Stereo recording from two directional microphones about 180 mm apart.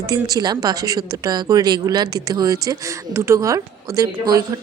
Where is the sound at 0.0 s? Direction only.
20° right (ahead or behind).